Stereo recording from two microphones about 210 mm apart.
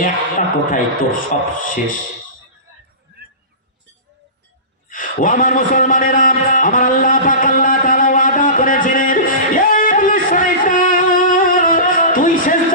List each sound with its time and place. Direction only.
0.0 s a man's voice: 40° left (ahead or behind)
3.1 s horse: 50° right (ahead or behind)
4.8 s a sound: 40° left (ahead or behind)